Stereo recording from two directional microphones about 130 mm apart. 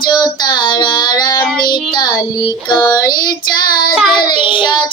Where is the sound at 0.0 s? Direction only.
30° left (ahead or behind).